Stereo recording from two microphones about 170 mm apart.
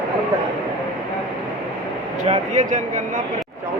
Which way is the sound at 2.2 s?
45° right (ahead or behind).